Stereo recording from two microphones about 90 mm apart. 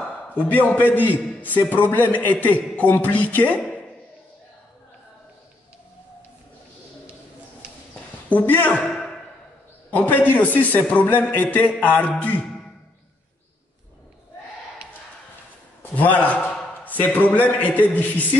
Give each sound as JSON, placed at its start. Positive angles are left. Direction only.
{"t": 0.0, "sound": "a man's voice", "side_deg": 20}
{"t": 8.3, "sound": "a man's voice", "side_deg": 20}
{"t": 8.9, "sound": "a sound", "side_deg": 5}
{"t": 9.8, "sound": "a man's voice", "side_deg": 20}
{"t": 15.8, "sound": "a man's voice", "side_deg": 20}